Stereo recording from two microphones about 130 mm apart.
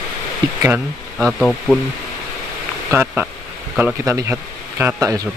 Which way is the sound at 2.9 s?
15° right (ahead or behind).